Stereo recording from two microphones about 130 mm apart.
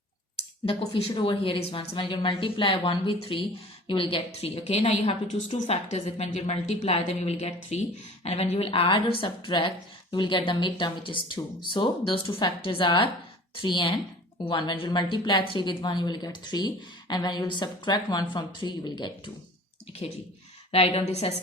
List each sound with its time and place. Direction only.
0.6 s a woman's voice: 45° left (ahead or behind)
20.7 s a woman's voice: 50° left (ahead or behind)